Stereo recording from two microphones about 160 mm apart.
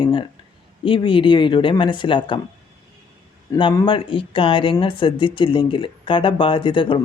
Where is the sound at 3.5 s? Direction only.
20° left (ahead or behind).